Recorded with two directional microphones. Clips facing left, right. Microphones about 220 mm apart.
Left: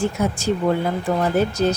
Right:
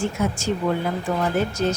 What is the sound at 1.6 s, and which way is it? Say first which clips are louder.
Speech: left 3 dB; 35° left (ahead or behind).